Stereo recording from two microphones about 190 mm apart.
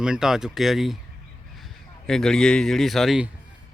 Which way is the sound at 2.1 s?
Centre (ahead or behind).